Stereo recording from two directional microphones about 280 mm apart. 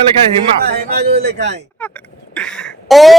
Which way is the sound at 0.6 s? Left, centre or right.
Right.